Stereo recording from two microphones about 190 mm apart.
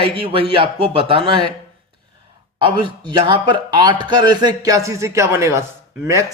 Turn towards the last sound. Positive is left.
turn(degrees=-15)  # may be behind; listen again after turning